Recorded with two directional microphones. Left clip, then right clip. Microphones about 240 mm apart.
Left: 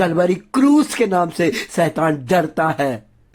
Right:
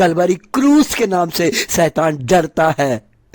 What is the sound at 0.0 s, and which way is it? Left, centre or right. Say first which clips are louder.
Speech: right 3 dB; right.